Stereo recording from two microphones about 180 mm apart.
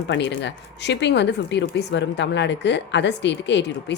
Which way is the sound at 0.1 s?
80° left.